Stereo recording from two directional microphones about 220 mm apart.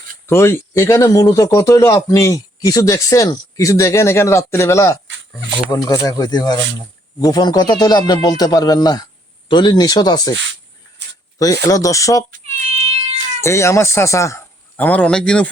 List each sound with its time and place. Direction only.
0.3 s speech: 10° left (ahead or behind)
11.3 s speech: 15° left (ahead or behind)
12.3 s cat: 30° right (ahead or behind)
13.4 s speech: 10° left (ahead or behind)